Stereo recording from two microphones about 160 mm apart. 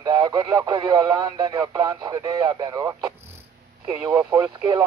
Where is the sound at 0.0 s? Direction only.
25° right (ahead or behind).